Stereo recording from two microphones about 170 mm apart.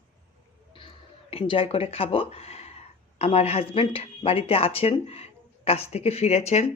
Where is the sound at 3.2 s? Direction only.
35° left (ahead or behind).